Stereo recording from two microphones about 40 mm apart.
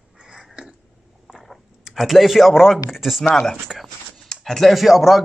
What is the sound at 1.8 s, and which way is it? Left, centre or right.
Speech, centre.